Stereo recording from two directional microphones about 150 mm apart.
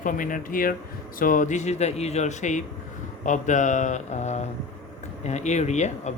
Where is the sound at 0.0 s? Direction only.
60° left (ahead or behind).